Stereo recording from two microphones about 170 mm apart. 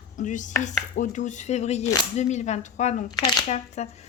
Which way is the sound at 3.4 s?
40° left (ahead or behind).